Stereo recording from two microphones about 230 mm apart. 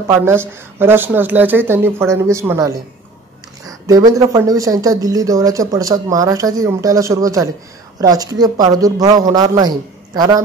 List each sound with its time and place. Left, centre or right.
0.1 s speech: centre